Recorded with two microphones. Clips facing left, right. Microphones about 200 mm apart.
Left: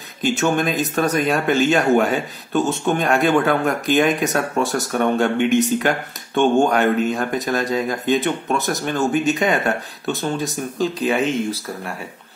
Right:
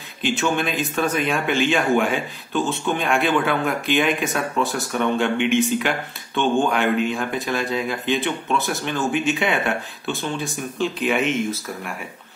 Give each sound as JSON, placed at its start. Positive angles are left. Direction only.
{"t": 0.2, "sound": "speech", "side_deg": 40}